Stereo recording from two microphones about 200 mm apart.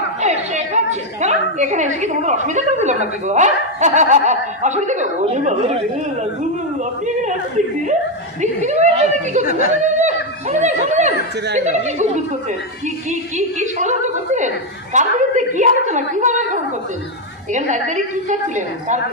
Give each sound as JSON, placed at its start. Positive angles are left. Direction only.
{"t": 0.2, "sound": "a woman's voice", "side_deg": -35}
{"t": 8.4, "sound": "a woman's voice", "side_deg": -35}
{"t": 17.5, "sound": "a woman's voice", "side_deg": -35}